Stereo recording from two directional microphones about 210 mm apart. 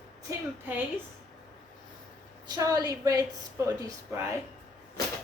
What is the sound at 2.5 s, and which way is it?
A woman's voice, 15° right (ahead or behind).